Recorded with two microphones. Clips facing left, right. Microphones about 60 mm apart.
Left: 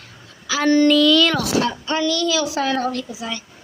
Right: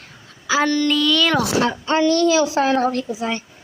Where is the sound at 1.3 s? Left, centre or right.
Right.